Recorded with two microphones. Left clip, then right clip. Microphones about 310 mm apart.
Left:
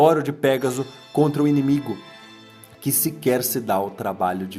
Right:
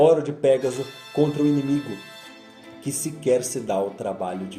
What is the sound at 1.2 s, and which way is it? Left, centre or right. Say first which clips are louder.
Speech: left 2 dB; left.